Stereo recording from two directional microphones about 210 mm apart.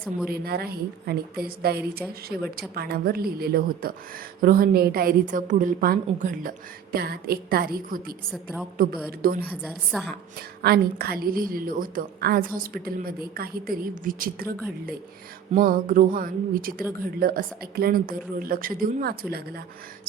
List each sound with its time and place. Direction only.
0.3 s a woman's voice: 50° right (ahead or behind)
8.3 s a woman's voice: centre (ahead or behind)
9.2 s a woman's voice: 45° right (ahead or behind)
9.6 s a woman's voice: centre (ahead or behind)
10.6 s a woman's voice: 45° right (ahead or behind)
15.5 s a woman's voice: 40° right (ahead or behind)